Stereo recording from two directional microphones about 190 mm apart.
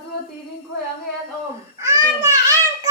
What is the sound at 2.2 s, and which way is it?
Child singing, 15° right (ahead or behind).